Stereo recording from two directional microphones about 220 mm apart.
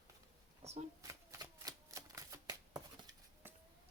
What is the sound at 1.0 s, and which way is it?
Shuffling cards, 15° right (ahead or behind).